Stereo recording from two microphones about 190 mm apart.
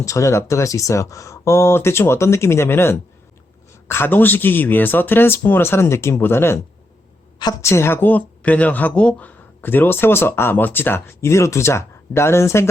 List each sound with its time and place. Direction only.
0.0 s a woman's voice: 15° left (ahead or behind)